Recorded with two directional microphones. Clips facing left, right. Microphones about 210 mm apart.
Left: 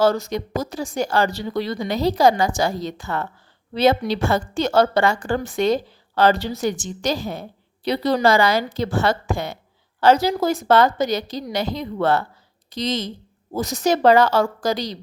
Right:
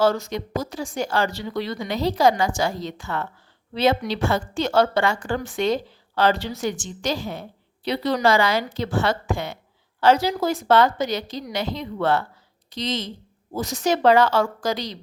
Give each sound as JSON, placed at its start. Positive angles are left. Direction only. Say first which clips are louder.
{"t": 0.0, "sound": "a woman's voice", "louder": "left 2 dB", "side_deg": 40}